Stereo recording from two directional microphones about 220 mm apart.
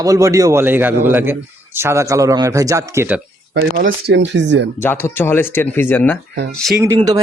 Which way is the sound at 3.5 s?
45° right (ahead or behind).